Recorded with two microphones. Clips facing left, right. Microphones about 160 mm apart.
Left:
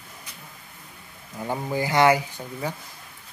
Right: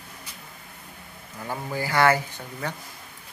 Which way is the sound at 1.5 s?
20° left (ahead or behind).